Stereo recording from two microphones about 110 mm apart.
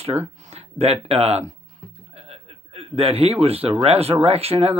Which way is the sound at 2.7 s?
60° right (ahead or behind).